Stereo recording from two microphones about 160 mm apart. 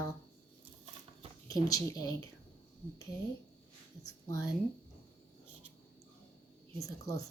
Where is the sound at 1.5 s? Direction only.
25° left (ahead or behind).